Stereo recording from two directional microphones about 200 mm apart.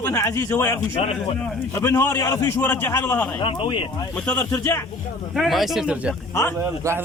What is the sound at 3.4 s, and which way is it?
Speech, 25° left (ahead or behind).